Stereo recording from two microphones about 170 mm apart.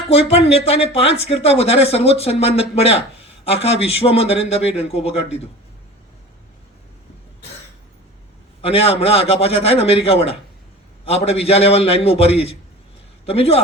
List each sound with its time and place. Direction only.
0.1 s speech: 35° left (ahead or behind)
8.6 s speech: 35° left (ahead or behind)